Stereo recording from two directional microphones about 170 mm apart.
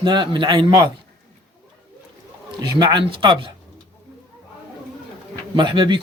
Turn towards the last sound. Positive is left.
turn(degrees=-30)  # may be behind; listen again after turning